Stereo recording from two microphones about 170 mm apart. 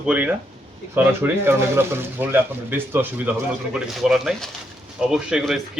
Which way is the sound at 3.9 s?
Centre (ahead or behind).